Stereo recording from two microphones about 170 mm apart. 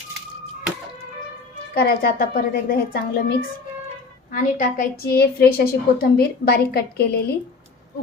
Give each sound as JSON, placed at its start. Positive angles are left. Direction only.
{"t": 1.7, "sound": "a woman's voice", "side_deg": 65}
{"t": 4.3, "sound": "a woman's voice", "side_deg": 50}